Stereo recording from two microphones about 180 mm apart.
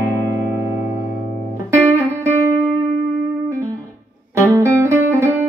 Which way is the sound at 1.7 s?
15° right (ahead or behind).